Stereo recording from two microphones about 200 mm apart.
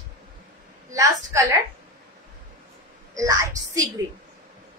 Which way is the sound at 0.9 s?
15° right (ahead or behind).